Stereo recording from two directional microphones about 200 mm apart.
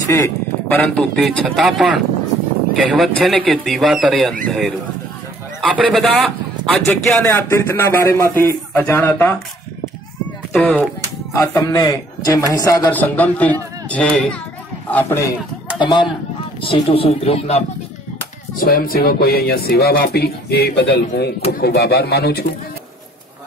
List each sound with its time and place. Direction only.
0.7 s a man's voice: 5° left (ahead or behind)
10.5 s a man's voice: 5° left (ahead or behind)
15.8 s speech: 25° left (ahead or behind)
18.6 s speech: 45° left (ahead or behind)